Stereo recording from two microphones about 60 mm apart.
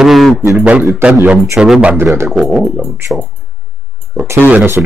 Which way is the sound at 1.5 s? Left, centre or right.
Centre.